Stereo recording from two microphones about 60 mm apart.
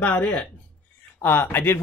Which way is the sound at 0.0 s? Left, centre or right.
Left.